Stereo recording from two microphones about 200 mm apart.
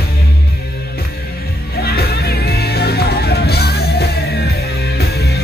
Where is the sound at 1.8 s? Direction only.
50° left (ahead or behind).